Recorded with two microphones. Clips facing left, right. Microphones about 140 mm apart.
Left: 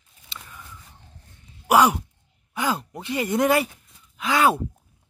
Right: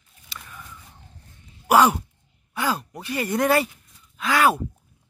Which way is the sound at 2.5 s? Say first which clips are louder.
Even; 20° left (ahead or behind).